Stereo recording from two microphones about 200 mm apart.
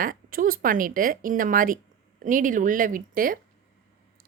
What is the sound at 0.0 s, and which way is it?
A woman's voice, 45° right (ahead or behind).